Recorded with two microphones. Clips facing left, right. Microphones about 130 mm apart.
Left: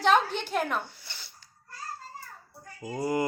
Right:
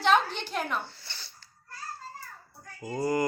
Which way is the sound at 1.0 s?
15° left (ahead or behind).